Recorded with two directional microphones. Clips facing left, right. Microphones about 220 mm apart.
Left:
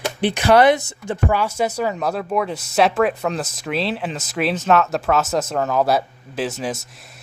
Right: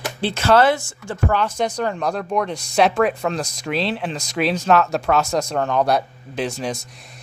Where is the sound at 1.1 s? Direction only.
10° left (ahead or behind).